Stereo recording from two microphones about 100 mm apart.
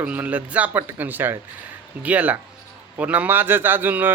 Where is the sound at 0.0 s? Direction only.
15° right (ahead or behind).